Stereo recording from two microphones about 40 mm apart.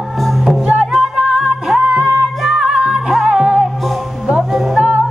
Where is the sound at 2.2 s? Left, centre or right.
Centre.